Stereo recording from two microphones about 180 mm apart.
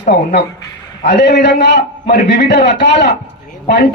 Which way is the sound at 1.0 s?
65° left (ahead or behind).